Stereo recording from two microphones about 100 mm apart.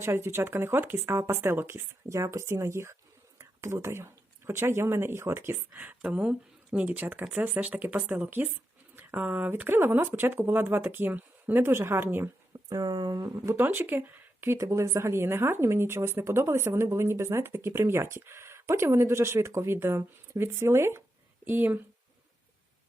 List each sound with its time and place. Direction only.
0.0 s a woman's voice: 25° right (ahead or behind)
12.6 s speech: 40° right (ahead or behind)
13.6 s a woman's voice: 20° right (ahead or behind)